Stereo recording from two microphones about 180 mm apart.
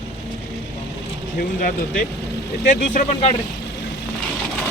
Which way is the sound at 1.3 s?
50° left (ahead or behind).